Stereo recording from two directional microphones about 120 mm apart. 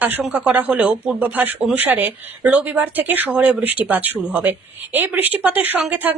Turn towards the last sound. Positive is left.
turn(degrees=-15)  # may be behind; listen again after turning